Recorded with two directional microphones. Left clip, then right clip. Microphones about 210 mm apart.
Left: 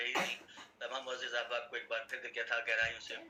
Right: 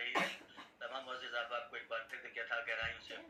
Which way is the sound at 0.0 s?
40° left (ahead or behind).